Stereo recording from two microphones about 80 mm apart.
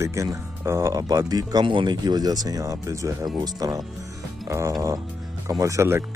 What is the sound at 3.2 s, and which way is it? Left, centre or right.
Speech, right.